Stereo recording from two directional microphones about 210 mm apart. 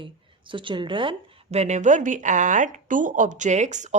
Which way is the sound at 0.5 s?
25° right (ahead or behind).